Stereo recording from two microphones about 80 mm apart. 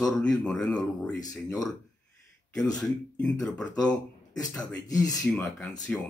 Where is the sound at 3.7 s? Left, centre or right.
Left.